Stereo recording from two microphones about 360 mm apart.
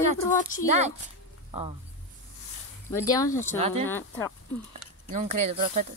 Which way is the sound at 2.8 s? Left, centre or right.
Centre.